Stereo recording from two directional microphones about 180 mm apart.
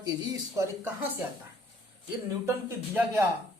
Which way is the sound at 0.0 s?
20° right (ahead or behind).